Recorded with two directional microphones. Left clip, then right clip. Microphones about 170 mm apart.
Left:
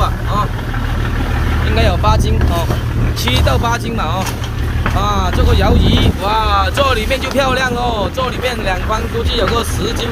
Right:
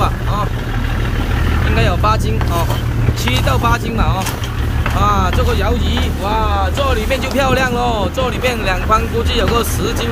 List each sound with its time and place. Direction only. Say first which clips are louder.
0.0 s boat: left 1 dB; 5° right (ahead or behind)
1.8 s speech: left 1 dB; 5° right (ahead or behind)
5.6 s speech: left 4 dB; 15° left (ahead or behind)
6.4 s speech: left 4 dB; 35° left (ahead or behind)
7.3 s speech: even; 5° right (ahead or behind)